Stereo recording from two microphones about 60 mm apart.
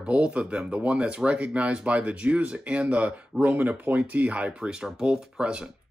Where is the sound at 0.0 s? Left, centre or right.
Right.